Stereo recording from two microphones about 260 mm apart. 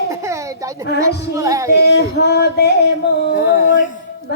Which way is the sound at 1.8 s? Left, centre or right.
Left.